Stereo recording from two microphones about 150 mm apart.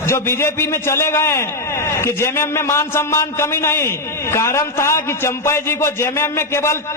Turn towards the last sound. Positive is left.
turn(degrees=15)  # may be behind; listen again after turning